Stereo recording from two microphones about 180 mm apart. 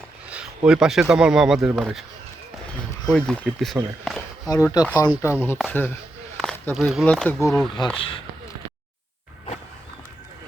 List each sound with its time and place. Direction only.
0.3 s a sound: 5° right (ahead or behind)
1.1 s speech: 5° right (ahead or behind)
3.1 s speech: 5° left (ahead or behind)
4.4 s speech: 20° left (ahead or behind)
7.9 s speech: 30° left (ahead or behind)